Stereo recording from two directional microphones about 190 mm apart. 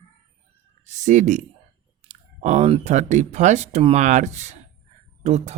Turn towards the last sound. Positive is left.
turn(degrees=-35)  # may be behind; listen again after turning